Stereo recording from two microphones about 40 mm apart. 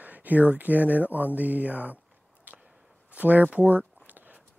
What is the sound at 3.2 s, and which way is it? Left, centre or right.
Speech, right.